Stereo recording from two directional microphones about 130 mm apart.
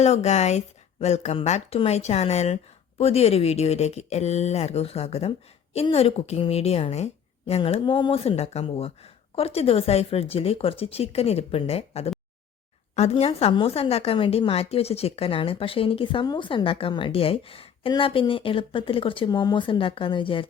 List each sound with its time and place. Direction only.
0.0 s a woman's voice: 60° left (ahead or behind); by 20.5 s 40° left (ahead or behind)